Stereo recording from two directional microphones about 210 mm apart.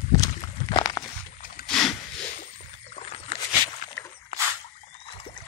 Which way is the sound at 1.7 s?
5° left (ahead or behind).